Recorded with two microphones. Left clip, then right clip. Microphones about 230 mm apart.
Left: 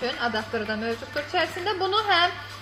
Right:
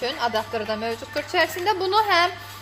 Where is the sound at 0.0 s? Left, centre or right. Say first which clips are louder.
Right 3 dB; right.